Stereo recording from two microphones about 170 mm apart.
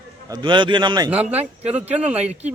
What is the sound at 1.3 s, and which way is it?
Speech, 40° right (ahead or behind).